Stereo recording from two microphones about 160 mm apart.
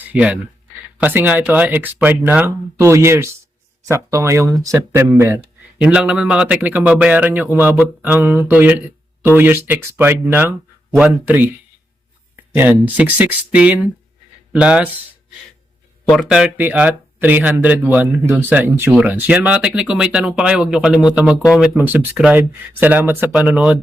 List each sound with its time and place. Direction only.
0.0 s speech: 10° right (ahead or behind)
12.5 s speech: 10° right (ahead or behind)
16.2 s speech: 5° right (ahead or behind)